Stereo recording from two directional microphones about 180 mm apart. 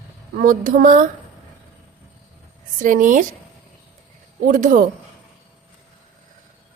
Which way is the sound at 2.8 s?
45° right (ahead or behind).